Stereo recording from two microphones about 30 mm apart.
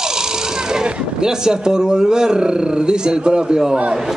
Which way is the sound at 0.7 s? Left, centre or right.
Right.